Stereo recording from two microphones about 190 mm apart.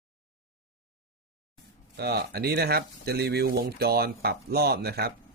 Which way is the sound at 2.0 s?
60° right (ahead or behind).